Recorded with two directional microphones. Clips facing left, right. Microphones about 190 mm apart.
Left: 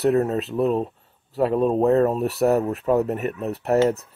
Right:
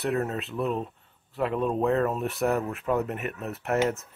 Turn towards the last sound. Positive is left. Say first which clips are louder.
# left 7 dB
turn(degrees=35)  # may be behind; listen again after turning